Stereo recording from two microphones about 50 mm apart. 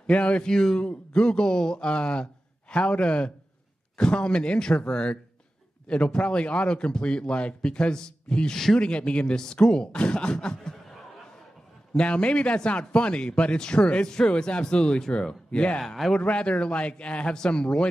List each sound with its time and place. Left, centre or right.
0.0 s a man's voice: left
11.9 s a man's voice: left